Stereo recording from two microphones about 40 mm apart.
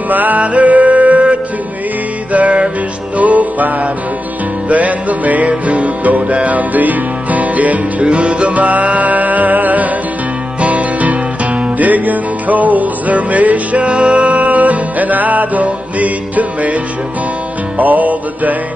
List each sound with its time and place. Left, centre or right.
0.1 s music: right
8.0 s music: right
17.7 s music: right